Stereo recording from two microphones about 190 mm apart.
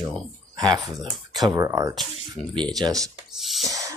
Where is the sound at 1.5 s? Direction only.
15° right (ahead or behind).